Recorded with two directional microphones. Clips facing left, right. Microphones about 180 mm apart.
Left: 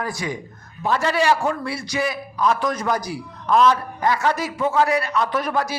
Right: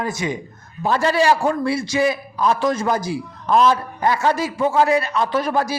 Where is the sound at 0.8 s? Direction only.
35° right (ahead or behind).